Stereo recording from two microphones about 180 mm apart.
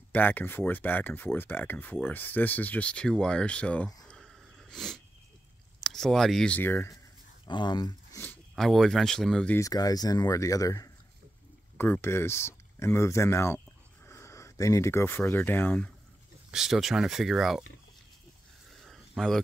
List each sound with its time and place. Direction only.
0.1 s speech: 10° left (ahead or behind)
7.4 s speech: 25° left (ahead or behind)
8.2 s speech: 5° left (ahead or behind)
9.6 s speech: 20° left (ahead or behind)
16.4 s speech: 5° right (ahead or behind)
18.7 s a sound: centre (ahead or behind)